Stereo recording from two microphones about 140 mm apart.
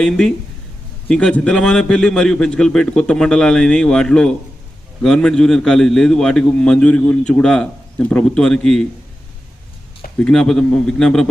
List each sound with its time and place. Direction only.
0.0 s a man's voice: 5° left (ahead or behind)
10.2 s a man's voice: 5° left (ahead or behind)